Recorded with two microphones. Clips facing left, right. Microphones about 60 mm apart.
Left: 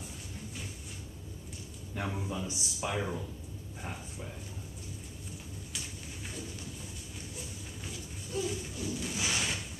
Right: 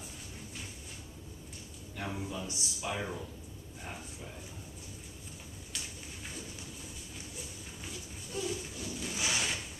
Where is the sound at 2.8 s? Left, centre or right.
Centre.